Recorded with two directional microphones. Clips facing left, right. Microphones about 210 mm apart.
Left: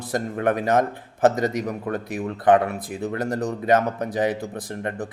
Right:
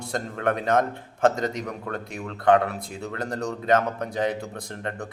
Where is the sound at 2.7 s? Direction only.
55° left (ahead or behind).